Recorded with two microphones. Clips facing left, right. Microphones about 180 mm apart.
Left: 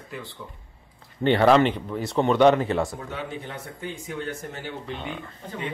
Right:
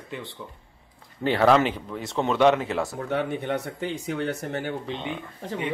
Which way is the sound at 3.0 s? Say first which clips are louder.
Right 7 dB; 60° right (ahead or behind).